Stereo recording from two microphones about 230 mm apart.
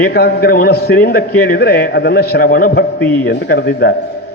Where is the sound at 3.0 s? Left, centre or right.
Centre.